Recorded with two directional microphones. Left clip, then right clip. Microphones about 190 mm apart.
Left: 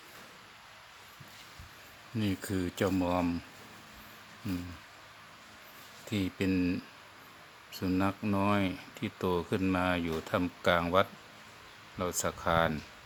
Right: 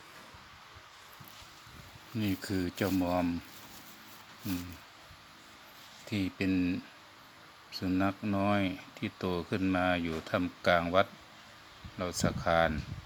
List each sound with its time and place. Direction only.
2.1 s speech: 10° left (ahead or behind)
6.1 s speech: 5° left (ahead or behind)